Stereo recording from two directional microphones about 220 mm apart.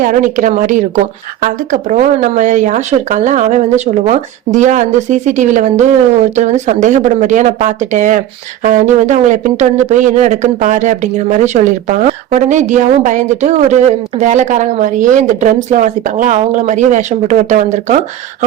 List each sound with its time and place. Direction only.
0.0 s speech: 35° right (ahead or behind)